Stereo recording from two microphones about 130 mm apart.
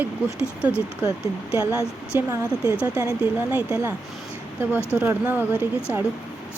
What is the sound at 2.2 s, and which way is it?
Speech, 20° right (ahead or behind).